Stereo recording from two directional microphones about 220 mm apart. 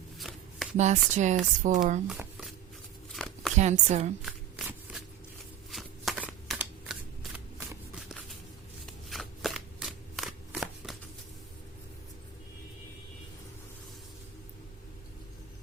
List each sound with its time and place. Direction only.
0.2 s chopping: centre (ahead or behind)
0.8 s speech: 30° right (ahead or behind)
2.0 s shuffling cards: centre (ahead or behind)
3.1 s a sound: centre (ahead or behind)
3.6 s speech: 30° right (ahead or behind)
4.2 s shuffling cards: 5° right (ahead or behind)
8.9 s shuffling cards: centre (ahead or behind)